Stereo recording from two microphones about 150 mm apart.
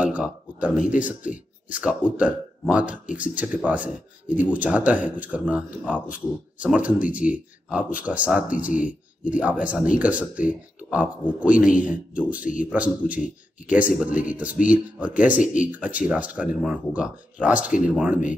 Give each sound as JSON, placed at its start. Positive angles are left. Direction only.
{"t": 0.0, "sound": "speech", "side_deg": -10}
{"t": 12.4, "sound": "speech", "side_deg": 60}
{"t": 12.6, "sound": "speech", "side_deg": -10}
{"t": 15.3, "sound": "speech", "side_deg": 60}
{"t": 15.6, "sound": "speech", "side_deg": -10}